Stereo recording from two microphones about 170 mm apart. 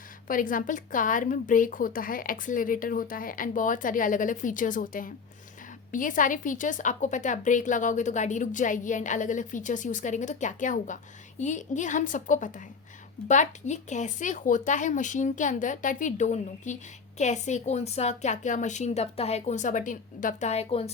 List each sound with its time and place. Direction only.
0.3 s a woman's voice: 55° left (ahead or behind); by 20.9 s 35° left (ahead or behind)